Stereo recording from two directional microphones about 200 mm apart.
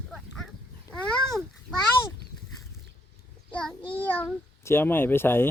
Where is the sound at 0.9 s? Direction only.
15° left (ahead or behind).